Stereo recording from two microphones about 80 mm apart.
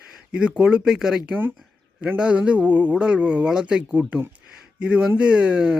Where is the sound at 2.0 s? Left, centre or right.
Centre.